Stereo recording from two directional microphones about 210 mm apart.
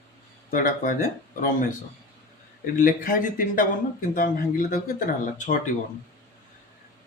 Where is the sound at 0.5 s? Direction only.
40° left (ahead or behind).